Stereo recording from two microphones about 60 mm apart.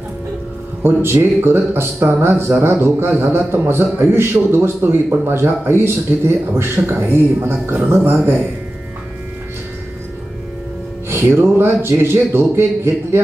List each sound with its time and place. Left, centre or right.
0.8 s speech: right
11.1 s a man's voice: right